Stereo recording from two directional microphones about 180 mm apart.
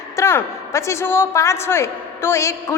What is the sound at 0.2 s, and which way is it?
A woman's voice, 15° left (ahead or behind).